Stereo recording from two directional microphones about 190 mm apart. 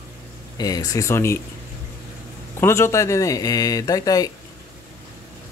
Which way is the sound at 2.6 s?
15° left (ahead or behind).